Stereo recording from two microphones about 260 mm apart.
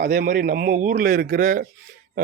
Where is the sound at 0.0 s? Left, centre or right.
Right.